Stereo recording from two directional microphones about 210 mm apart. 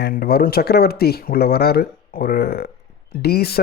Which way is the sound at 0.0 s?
45° left (ahead or behind).